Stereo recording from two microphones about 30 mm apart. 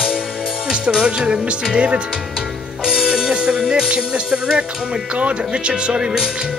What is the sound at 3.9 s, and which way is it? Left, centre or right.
Music, right.